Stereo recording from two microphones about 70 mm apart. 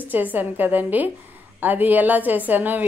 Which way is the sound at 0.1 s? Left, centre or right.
Right.